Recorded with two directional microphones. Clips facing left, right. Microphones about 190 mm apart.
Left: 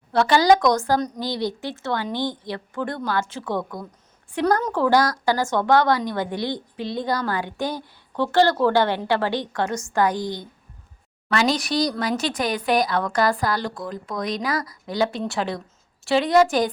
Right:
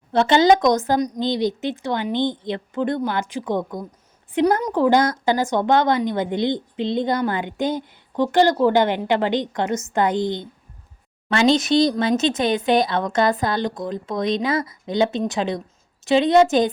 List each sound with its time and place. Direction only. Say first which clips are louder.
0.1 s a woman's voice: right 2 dB; 20° right (ahead or behind)